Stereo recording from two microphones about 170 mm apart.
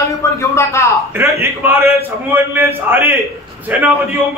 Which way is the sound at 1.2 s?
15° right (ahead or behind).